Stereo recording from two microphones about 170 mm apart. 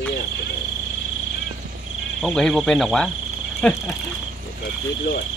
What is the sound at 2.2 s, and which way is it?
Speech, 5° left (ahead or behind).